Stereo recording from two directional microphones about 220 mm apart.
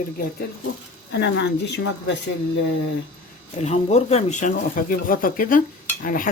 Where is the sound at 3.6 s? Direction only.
30° left (ahead or behind).